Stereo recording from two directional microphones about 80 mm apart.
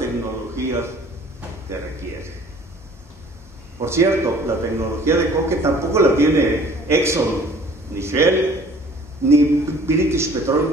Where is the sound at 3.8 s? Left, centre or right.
Right.